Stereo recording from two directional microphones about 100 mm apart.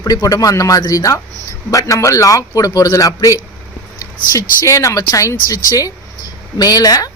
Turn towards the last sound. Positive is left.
turn(degrees=40)  # may be behind; listen again after turning